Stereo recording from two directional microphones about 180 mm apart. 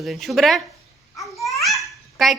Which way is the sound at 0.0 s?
Centre (ahead or behind).